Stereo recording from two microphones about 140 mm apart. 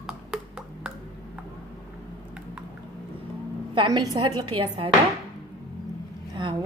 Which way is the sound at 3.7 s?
35° right (ahead or behind).